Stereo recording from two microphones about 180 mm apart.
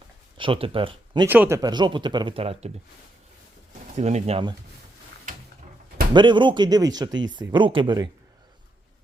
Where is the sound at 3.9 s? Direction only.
40° right (ahead or behind).